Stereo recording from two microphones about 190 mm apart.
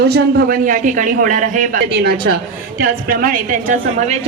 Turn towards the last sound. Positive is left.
turn(degrees=-35)  # may be behind; listen again after turning